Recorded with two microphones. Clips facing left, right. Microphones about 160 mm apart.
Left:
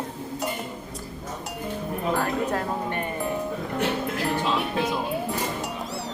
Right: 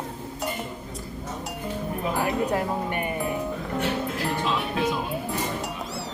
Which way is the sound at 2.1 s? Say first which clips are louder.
Right 4 dB; 10° right (ahead or behind).